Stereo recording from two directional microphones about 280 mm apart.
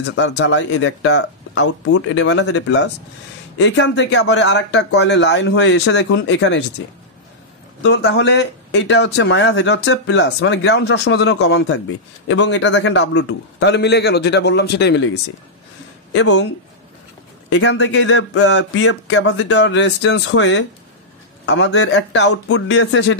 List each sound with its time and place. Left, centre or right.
0.1 s speech: left
7.8 s speech: left
16.1 s speech: left
17.5 s speech: left